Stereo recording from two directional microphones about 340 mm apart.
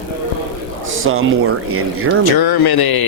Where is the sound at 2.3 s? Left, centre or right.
Left.